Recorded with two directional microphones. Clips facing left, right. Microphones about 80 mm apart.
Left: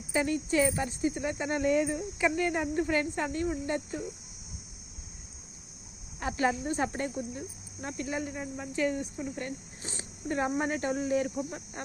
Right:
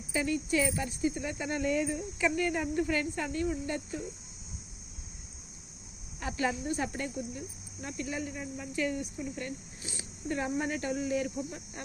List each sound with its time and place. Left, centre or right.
0.1 s speech: left
6.1 s speech: left